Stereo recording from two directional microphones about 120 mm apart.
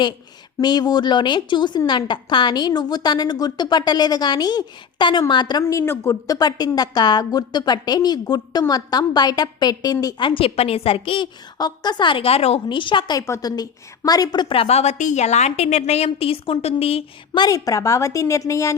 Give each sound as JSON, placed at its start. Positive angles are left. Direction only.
{"t": 0.6, "sound": "a woman's voice", "side_deg": 35}
{"t": 5.6, "sound": "a woman's voice", "side_deg": 20}
{"t": 11.5, "sound": "a woman's voice", "side_deg": 35}
{"t": 12.6, "sound": "a woman's voice", "side_deg": 40}
{"t": 13.1, "sound": "a woman's voice", "side_deg": 25}
{"t": 14.5, "sound": "a woman's voice", "side_deg": 55}
{"t": 17.3, "sound": "a woman's voice", "side_deg": 30}